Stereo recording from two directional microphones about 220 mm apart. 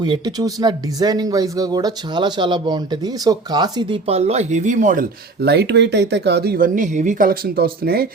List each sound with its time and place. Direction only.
0.0 s speech: 20° right (ahead or behind); by 8.0 s 45° right (ahead or behind)